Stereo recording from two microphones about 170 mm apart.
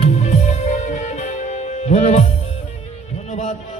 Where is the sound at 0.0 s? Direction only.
40° left (ahead or behind).